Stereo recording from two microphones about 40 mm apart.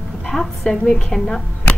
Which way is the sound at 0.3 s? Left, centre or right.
Centre.